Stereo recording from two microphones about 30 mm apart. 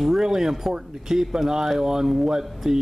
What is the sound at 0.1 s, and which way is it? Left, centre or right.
A man's voice, centre.